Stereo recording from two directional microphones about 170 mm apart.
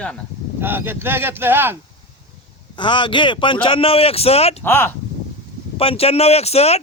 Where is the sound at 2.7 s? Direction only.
30° left (ahead or behind).